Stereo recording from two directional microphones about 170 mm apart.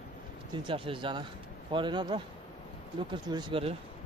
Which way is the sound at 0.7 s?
30° right (ahead or behind).